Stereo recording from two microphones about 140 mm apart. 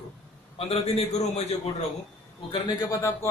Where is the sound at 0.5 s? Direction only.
45° left (ahead or behind).